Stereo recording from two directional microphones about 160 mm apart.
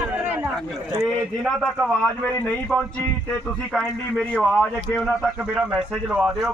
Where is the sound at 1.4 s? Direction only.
Centre (ahead or behind).